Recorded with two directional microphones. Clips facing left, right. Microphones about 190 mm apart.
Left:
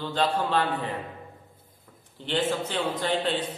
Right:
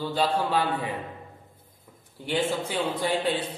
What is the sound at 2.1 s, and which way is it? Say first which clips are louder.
A man's voice: even; 10° right (ahead or behind).